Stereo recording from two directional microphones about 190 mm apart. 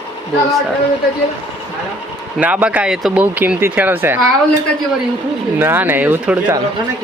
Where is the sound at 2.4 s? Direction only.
5° right (ahead or behind).